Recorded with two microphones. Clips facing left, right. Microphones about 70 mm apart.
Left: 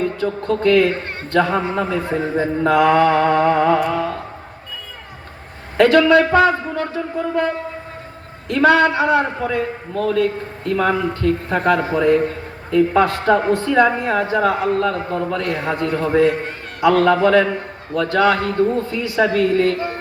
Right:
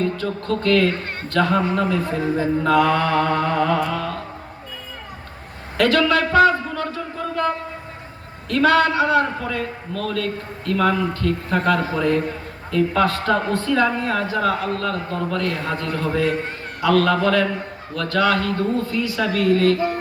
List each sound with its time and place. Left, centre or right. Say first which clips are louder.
0.2 s speech: left 4 dB; left
5.7 s a man's voice: left 6 dB; left
8.4 s speech: left 3 dB; left